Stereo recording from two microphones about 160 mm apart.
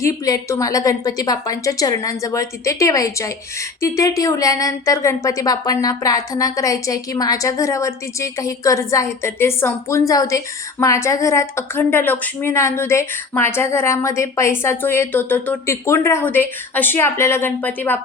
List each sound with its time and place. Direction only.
0.0 s a woman's voice: 20° left (ahead or behind)